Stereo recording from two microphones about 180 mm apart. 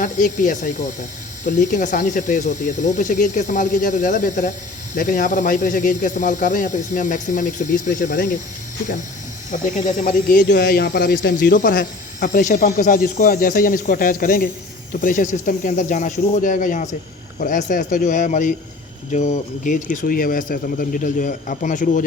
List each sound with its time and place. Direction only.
0.0 s speech: 45° left (ahead or behind)
9.5 s speech: 45° left (ahead or behind)
10.5 s speech: 60° left (ahead or behind)